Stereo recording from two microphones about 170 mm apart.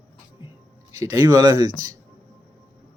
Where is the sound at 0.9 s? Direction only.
15° right (ahead or behind).